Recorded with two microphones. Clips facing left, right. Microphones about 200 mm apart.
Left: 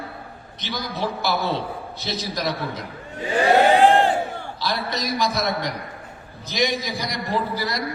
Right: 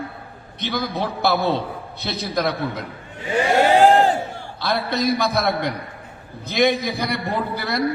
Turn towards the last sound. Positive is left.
turn(degrees=-60)  # may be behind; listen again after turning